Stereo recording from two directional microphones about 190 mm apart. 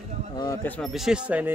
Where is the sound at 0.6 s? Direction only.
5° left (ahead or behind).